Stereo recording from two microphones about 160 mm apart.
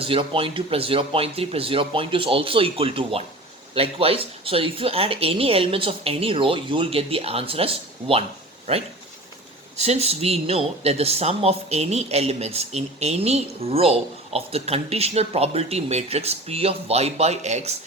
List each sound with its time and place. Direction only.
0.0 s speech: 35° right (ahead or behind)
9.7 s speech: 40° right (ahead or behind)